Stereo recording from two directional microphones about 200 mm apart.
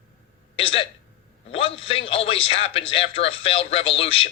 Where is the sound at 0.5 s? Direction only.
25° left (ahead or behind).